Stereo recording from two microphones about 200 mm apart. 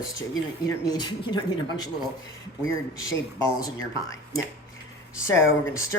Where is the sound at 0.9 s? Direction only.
20° left (ahead or behind).